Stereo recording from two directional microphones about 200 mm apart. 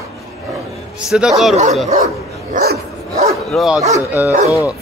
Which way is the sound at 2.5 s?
50° right (ahead or behind).